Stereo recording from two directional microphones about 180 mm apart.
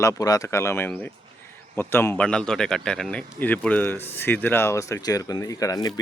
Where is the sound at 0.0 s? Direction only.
20° left (ahead or behind).